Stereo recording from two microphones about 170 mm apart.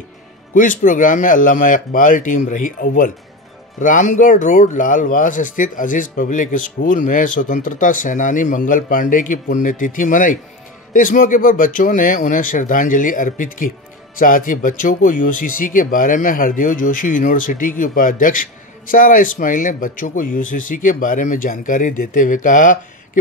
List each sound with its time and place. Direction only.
0.6 s speech: 50° left (ahead or behind)